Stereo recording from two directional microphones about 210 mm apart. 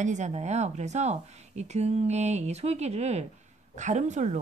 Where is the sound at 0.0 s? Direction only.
35° right (ahead or behind).